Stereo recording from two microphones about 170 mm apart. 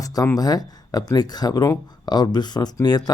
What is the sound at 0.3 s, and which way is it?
Speech, 20° left (ahead or behind).